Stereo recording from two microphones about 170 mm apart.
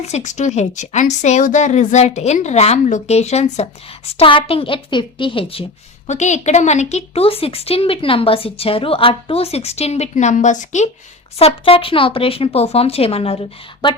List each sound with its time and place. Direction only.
0.0 s speech: 40° left (ahead or behind)
6.1 s speech: 45° left (ahead or behind)
11.3 s speech: 35° left (ahead or behind)